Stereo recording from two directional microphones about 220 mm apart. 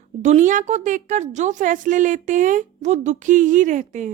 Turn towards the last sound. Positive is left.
turn(degrees=-35)  # may be behind; listen again after turning